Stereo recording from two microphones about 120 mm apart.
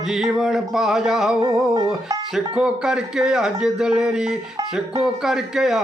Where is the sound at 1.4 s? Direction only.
35° right (ahead or behind).